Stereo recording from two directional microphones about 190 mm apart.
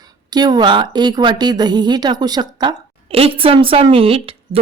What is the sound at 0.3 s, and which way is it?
A woman's voice, 20° right (ahead or behind).